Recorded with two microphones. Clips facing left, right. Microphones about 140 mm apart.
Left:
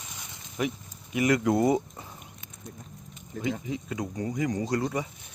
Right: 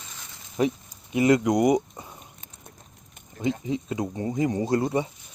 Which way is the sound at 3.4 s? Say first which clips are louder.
Right 5 dB; 25° right (ahead or behind).